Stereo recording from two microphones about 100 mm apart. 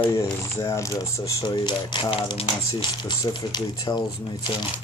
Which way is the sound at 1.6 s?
50° left (ahead or behind).